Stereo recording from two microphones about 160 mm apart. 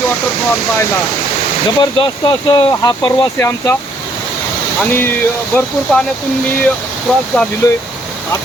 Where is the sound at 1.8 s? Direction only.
30° left (ahead or behind).